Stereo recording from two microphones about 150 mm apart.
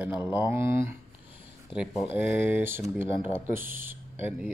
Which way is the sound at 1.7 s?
5° right (ahead or behind).